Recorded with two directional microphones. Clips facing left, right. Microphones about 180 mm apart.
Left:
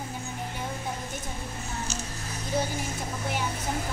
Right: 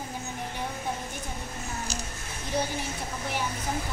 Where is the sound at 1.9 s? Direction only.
35° right (ahead or behind).